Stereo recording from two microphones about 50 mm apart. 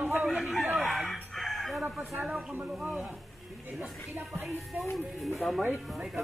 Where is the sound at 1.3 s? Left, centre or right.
Centre.